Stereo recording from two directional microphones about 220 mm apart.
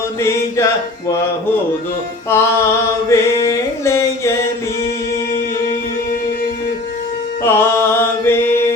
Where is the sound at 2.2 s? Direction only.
10° left (ahead or behind).